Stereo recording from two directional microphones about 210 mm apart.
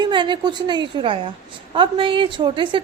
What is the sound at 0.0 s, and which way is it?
A woman's voice, 20° right (ahead or behind).